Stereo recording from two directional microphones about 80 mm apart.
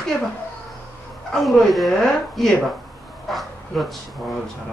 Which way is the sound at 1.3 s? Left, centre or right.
Centre.